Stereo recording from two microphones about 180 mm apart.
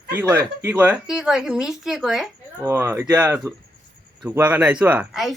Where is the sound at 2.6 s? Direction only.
15° right (ahead or behind).